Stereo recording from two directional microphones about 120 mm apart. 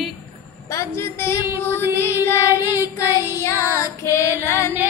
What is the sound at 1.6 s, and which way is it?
Child singing, 20° left (ahead or behind).